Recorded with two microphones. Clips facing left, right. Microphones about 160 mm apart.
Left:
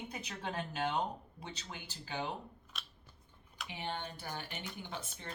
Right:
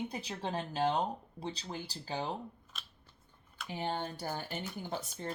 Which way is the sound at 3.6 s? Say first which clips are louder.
Right 5 dB; 40° right (ahead or behind).